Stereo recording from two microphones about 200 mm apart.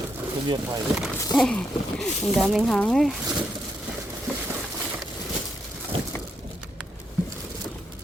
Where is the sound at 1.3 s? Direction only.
5° left (ahead or behind).